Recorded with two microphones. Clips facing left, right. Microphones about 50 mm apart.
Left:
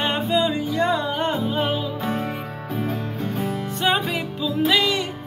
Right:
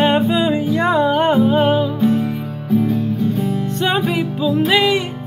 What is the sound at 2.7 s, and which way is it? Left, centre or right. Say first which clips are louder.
Music: right 10 dB; left.